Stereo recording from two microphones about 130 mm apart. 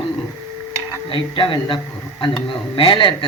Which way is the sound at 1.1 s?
40° left (ahead or behind).